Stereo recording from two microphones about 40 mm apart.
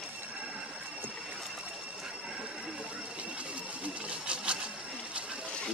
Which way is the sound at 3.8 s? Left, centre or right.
Right.